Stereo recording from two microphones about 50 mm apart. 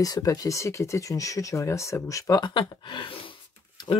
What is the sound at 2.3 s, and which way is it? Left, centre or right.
Speech, left.